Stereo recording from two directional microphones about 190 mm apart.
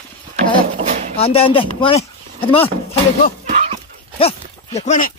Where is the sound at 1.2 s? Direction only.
30° left (ahead or behind).